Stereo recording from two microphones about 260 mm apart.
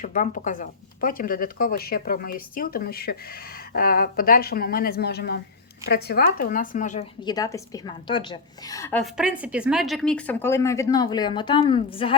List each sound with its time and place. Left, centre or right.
0.0 s speech: left